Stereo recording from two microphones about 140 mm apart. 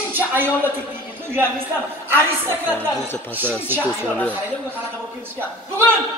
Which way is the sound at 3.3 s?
15° right (ahead or behind).